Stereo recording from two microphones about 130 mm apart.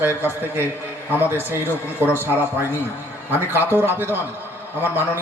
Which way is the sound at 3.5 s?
15° right (ahead or behind).